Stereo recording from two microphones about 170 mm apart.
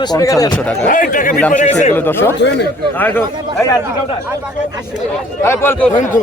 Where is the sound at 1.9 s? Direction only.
10° left (ahead or behind).